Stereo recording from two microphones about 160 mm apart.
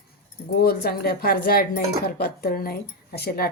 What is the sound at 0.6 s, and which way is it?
Speech, 70° left (ahead or behind).